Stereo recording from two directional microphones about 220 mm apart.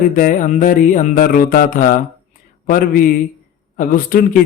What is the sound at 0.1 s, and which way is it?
Mantra, 35° left (ahead or behind).